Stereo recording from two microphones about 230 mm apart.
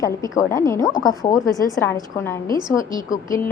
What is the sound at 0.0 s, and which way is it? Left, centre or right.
A woman's voice, centre.